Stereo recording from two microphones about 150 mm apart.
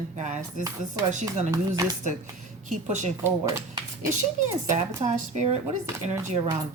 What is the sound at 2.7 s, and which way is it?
Speech, 55° right (ahead or behind).